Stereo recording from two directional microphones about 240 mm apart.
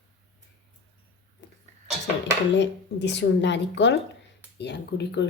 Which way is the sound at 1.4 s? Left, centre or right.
Left.